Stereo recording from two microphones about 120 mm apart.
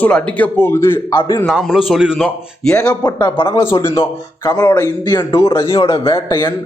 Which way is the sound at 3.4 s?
40° left (ahead or behind).